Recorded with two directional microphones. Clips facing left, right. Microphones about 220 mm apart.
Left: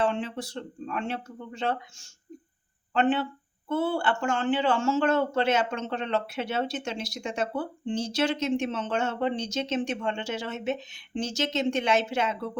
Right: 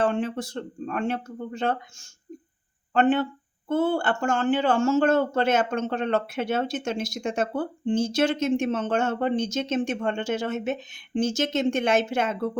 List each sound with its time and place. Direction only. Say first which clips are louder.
0.0 s speech: right 3 dB; 50° right (ahead or behind)